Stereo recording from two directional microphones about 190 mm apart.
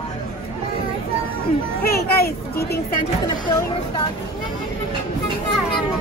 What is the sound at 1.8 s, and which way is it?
Children playing, 55° left (ahead or behind).